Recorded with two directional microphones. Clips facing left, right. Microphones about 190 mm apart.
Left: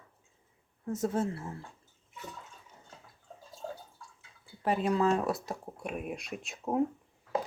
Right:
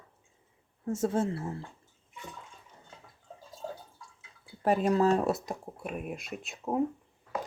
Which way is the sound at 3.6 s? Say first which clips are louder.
Right 1 dB; centre (ahead or behind).